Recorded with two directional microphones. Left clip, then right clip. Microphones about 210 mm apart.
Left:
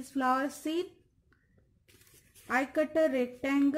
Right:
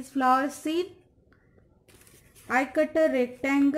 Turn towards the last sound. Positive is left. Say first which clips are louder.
# right 5 dB
turn(degrees=10)  # may be behind; listen again after turning